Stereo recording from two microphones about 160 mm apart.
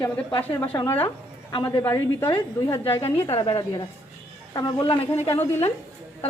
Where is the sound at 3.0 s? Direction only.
35° left (ahead or behind).